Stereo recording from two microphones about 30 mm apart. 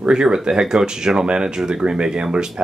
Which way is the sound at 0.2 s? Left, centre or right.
Right.